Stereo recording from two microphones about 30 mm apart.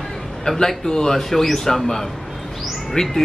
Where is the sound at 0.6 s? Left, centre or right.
Centre.